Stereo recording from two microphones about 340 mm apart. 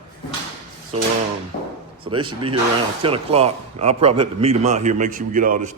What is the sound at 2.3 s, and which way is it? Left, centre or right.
A man's voice, centre.